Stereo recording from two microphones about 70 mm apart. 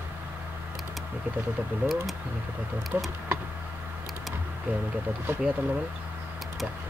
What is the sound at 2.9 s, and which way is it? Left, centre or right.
Speech, right.